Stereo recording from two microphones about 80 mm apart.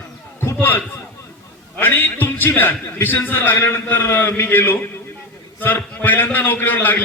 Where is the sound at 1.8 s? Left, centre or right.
Left.